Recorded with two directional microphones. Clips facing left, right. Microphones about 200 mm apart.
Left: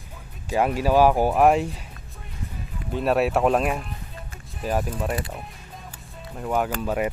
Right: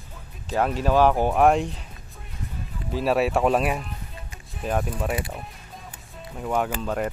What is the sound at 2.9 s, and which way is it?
Speech, centre (ahead or behind).